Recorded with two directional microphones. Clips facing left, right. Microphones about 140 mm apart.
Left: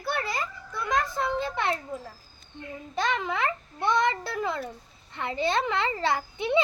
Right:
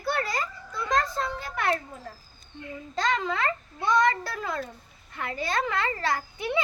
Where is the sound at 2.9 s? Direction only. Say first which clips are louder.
Right 1 dB; 15° left (ahead or behind).